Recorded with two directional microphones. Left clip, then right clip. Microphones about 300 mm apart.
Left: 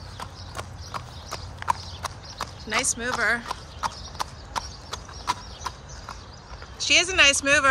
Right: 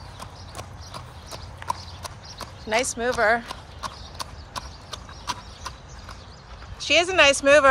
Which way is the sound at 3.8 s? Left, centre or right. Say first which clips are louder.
Left 5 dB; left.